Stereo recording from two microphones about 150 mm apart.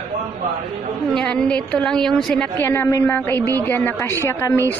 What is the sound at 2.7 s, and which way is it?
Speech, 20° left (ahead or behind).